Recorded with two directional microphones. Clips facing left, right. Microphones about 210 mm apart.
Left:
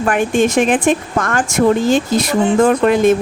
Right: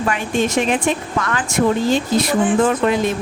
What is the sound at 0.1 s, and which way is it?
Speech, 50° left (ahead or behind).